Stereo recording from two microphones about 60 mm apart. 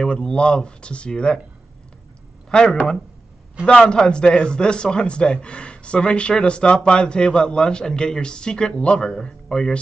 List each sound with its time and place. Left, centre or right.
0.0 s a man's voice: centre
2.5 s a man's voice: centre
3.9 s a man's voice: centre